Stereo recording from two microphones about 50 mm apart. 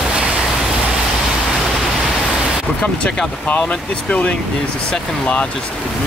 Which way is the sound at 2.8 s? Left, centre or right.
Left.